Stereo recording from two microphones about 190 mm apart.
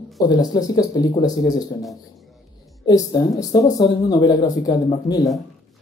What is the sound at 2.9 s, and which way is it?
Speech, 20° left (ahead or behind).